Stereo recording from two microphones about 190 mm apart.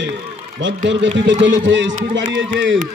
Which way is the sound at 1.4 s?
75° right (ahead or behind).